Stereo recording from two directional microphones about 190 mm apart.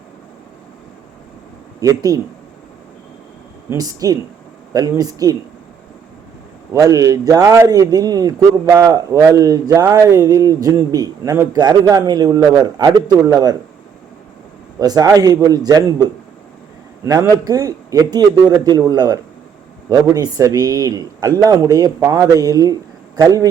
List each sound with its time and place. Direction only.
1.8 s speech: 20° right (ahead or behind)
3.7 s speech: 20° right (ahead or behind)
6.7 s speech: 15° right (ahead or behind)
14.8 s a man's voice: 20° right (ahead or behind)